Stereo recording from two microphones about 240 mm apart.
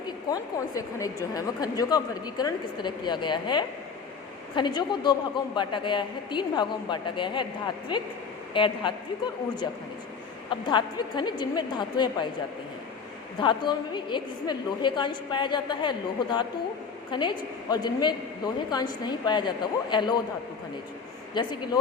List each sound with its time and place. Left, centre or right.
0.3 s a woman's voice: centre
13.4 s a woman's voice: centre
21.4 s a woman's voice: centre